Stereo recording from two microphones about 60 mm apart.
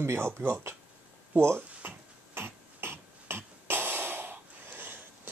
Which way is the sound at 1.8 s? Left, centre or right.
Right.